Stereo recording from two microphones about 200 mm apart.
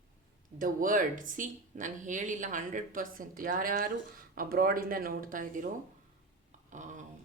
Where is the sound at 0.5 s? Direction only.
40° right (ahead or behind).